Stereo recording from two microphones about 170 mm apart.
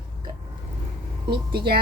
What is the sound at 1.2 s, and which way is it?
Speech, 25° right (ahead or behind).